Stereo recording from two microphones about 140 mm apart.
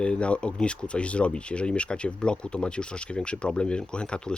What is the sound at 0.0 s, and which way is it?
Speech, 10° left (ahead or behind).